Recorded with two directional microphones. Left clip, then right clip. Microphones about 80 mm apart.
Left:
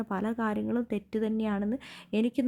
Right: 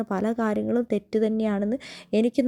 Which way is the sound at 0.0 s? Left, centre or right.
Right.